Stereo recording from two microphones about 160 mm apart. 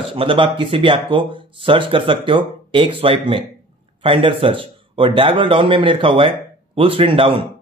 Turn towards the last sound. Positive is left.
turn(degrees=-35)  # may be behind; listen again after turning